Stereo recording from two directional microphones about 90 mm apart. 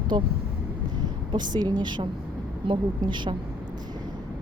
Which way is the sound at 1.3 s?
50° right (ahead or behind).